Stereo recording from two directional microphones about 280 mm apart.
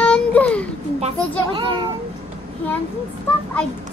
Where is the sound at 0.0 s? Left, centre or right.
Centre.